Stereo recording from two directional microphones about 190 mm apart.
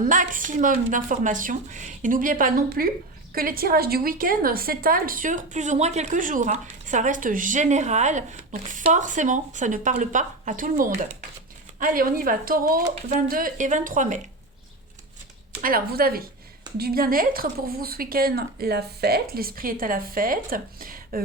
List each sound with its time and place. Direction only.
0.0 s a woman's voice: 45° right (ahead or behind)
15.6 s a woman's voice: 50° right (ahead or behind)